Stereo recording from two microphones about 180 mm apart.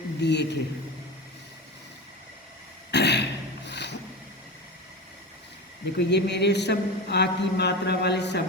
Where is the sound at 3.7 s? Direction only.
70° left (ahead or behind).